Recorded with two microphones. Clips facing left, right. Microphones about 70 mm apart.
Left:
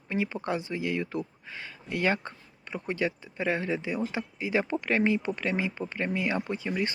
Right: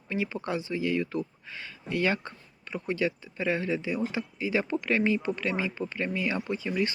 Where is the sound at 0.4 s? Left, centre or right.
Left.